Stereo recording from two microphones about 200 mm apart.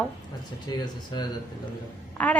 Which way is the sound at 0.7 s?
20° left (ahead or behind).